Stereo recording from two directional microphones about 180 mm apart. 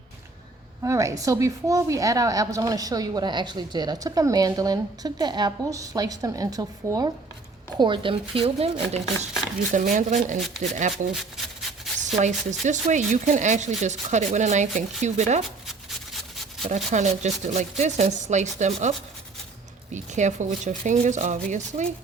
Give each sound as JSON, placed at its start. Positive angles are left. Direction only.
{"t": 0.8, "sound": "a woman's voice", "side_deg": -15}
{"t": 11.9, "sound": "speech", "side_deg": -40}
{"t": 16.6, "sound": "speech", "side_deg": -40}